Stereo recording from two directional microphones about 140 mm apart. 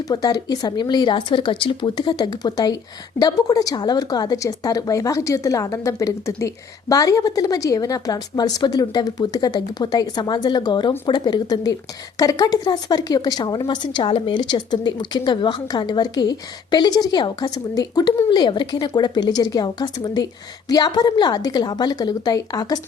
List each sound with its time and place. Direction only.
0.1 s a woman's voice: 30° left (ahead or behind)